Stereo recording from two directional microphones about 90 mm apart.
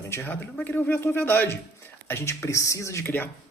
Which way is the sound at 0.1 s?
30° left (ahead or behind).